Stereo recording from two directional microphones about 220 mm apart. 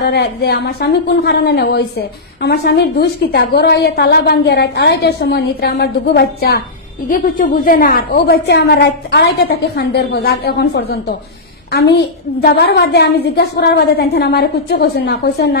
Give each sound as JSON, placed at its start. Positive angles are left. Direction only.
{"t": 0.0, "sound": "a woman's voice", "side_deg": 50}
{"t": 12.4, "sound": "a woman's voice", "side_deg": 45}